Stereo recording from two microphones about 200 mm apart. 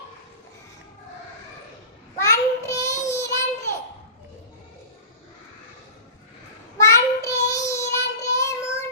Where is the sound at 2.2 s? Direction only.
15° left (ahead or behind).